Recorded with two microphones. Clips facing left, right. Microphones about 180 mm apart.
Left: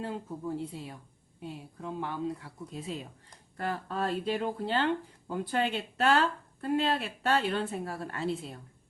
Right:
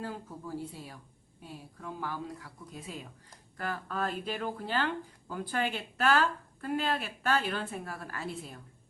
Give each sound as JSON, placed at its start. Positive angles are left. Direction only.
{"t": 0.0, "sound": "speech", "side_deg": 25}